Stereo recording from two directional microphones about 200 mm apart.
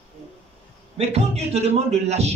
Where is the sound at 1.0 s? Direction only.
30° right (ahead or behind).